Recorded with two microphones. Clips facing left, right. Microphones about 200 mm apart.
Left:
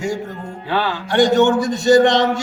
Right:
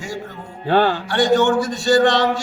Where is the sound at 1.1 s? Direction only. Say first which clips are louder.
Left 4 dB; 20° left (ahead or behind).